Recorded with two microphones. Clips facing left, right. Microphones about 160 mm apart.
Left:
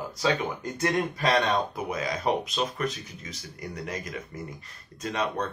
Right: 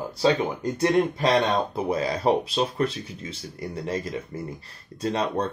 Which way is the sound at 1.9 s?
30° right (ahead or behind).